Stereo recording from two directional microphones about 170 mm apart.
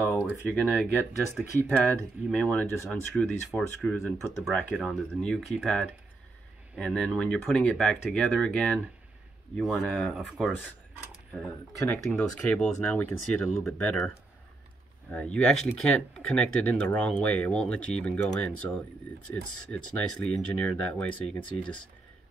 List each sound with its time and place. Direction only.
0.1 s speech: 10° left (ahead or behind)
11.9 s speech: 10° left (ahead or behind)